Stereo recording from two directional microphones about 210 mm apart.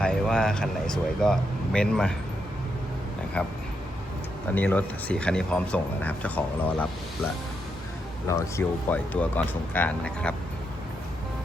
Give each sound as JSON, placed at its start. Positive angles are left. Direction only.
{"t": 0.0, "sound": "speech", "side_deg": 5}
{"t": 3.4, "sound": "speech", "side_deg": 5}
{"t": 4.5, "sound": "speech", "side_deg": 10}
{"t": 8.3, "sound": "speech", "side_deg": 15}